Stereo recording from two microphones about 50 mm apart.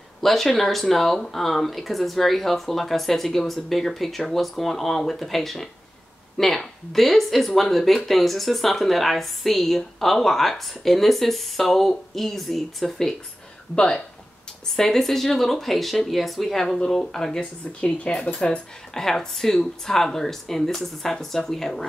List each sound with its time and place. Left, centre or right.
0.2 s speech: centre
13.7 s speech: centre
14.8 s speech: centre; by 18.6 s left
18.9 s speech: centre